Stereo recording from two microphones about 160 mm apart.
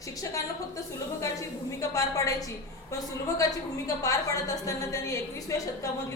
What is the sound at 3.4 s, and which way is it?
A woman's voice, 20° left (ahead or behind).